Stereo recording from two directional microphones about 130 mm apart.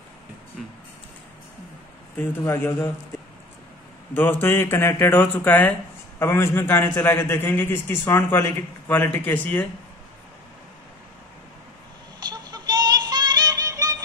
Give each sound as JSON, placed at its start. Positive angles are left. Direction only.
{"t": 2.1, "sound": "speech", "side_deg": 20}
{"t": 4.1, "sound": "a man's voice", "side_deg": 15}
{"t": 12.3, "sound": "synthetic singing", "side_deg": -30}